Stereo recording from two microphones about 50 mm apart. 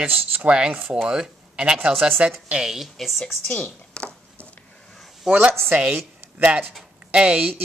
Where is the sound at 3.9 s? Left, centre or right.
Left.